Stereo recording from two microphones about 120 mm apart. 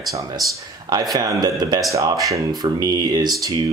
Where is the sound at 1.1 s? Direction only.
30° right (ahead or behind).